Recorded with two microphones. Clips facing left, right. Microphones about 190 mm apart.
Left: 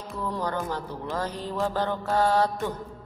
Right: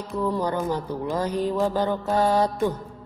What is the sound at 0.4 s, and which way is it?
A woman's voice, 15° right (ahead or behind).